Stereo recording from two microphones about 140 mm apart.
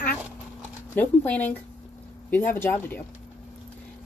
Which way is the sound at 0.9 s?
10° left (ahead or behind).